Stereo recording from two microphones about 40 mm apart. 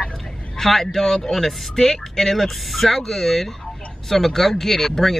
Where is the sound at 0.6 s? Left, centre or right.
Centre.